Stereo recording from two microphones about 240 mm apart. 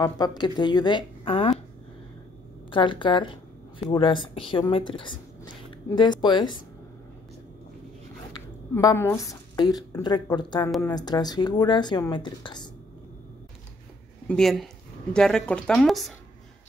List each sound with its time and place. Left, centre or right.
0.0 s speech: centre
2.7 s speech: left
8.3 s a woman's voice: centre
14.2 s speech: centre